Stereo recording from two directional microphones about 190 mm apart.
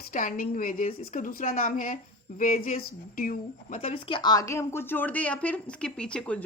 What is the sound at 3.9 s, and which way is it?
A woman's voice, 25° left (ahead or behind).